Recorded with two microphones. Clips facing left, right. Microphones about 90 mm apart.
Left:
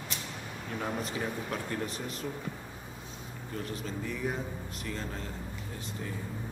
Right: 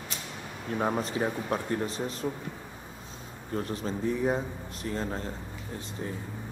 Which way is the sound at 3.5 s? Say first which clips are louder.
Right 6 dB; 35° right (ahead or behind).